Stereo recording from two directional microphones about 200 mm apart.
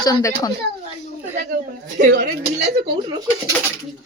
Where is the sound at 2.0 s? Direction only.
45° right (ahead or behind).